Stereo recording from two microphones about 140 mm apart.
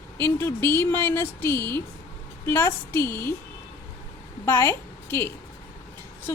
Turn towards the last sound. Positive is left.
turn(degrees=15)  # may be behind; listen again after turning